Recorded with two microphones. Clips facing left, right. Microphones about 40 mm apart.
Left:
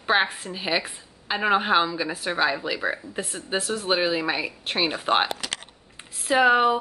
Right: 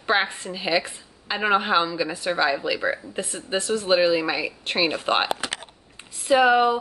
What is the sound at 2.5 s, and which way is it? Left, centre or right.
Speech, centre.